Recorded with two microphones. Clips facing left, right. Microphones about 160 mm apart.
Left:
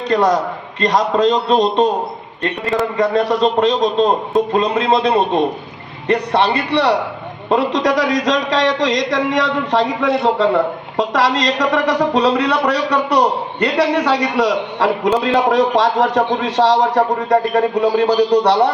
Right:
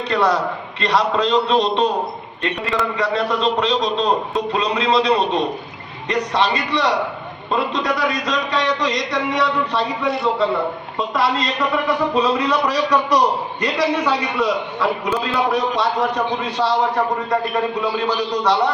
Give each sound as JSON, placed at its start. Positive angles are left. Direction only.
{"t": 0.1, "sound": "a man's voice", "side_deg": 40}
{"t": 7.5, "sound": "a man's voice", "side_deg": 85}
{"t": 17.0, "sound": "a man's voice", "side_deg": 40}